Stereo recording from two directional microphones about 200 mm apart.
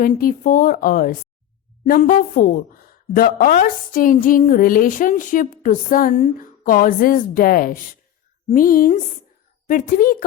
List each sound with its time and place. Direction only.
0.0 s speech: 45° left (ahead or behind)